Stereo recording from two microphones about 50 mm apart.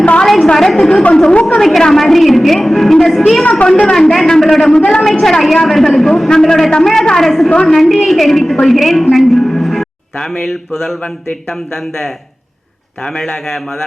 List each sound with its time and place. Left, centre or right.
0.2 s a sound: centre
0.5 s a woman's voice: centre; by 1.5 s left
1.5 s a woman's voice: centre
5.2 s a woman's voice: centre
7.5 s a man's voice: centre
8.0 s a woman's voice: centre
9.1 s music: centre
13.1 s a man's voice: centre